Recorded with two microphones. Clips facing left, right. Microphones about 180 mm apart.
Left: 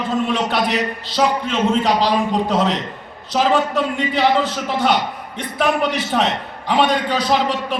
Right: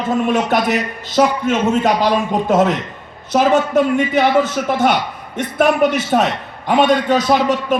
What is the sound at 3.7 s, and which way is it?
A man's voice, 50° right (ahead or behind).